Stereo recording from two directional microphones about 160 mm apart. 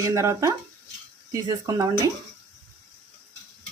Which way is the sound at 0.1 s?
20° right (ahead or behind).